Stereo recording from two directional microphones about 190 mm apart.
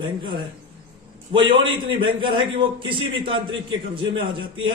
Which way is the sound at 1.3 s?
25° right (ahead or behind).